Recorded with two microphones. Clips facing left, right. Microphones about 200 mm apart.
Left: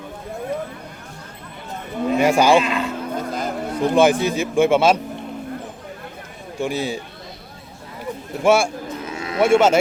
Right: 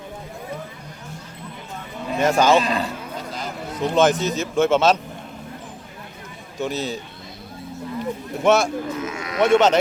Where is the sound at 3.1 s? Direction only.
50° left (ahead or behind).